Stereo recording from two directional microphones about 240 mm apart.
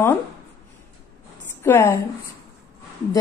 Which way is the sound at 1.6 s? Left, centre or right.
Centre.